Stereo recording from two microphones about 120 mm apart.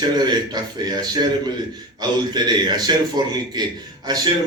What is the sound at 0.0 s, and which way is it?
A man's voice, 35° right (ahead or behind).